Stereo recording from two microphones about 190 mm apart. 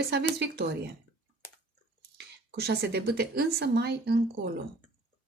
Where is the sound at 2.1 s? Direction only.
60° right (ahead or behind).